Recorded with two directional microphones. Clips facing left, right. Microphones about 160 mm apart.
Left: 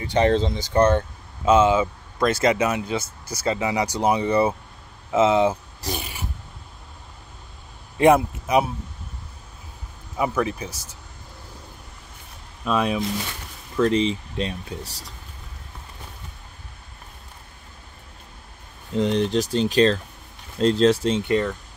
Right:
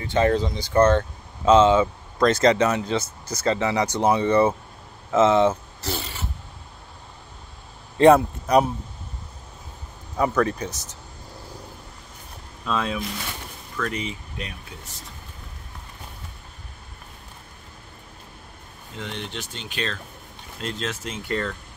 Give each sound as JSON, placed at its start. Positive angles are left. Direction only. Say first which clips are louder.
{"t": 0.1, "sound": "speech", "louder": "left 1 dB", "side_deg": 20}
{"t": 0.7, "sound": "speech", "louder": "right 1 dB", "side_deg": 15}
{"t": 8.0, "sound": "speech", "louder": "right 2 dB", "side_deg": 15}
{"t": 10.1, "sound": "speech", "louder": "right 2 dB", "side_deg": 10}
{"t": 12.6, "sound": "speech", "louder": "left 4 dB", "side_deg": 15}
{"t": 13.7, "sound": "speech", "louder": "left 10 dB", "side_deg": 30}
{"t": 18.9, "sound": "speech", "louder": "left 13 dB", "side_deg": 35}